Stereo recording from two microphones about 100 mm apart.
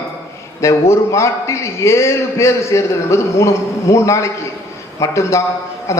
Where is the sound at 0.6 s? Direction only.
30° left (ahead or behind).